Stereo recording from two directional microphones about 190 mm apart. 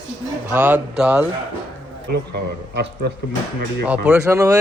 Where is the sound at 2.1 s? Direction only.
60° right (ahead or behind).